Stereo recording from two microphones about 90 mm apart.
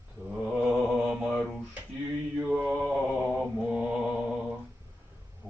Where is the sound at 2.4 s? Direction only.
10° right (ahead or behind).